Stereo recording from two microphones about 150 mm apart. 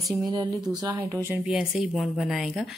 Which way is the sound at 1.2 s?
15° right (ahead or behind).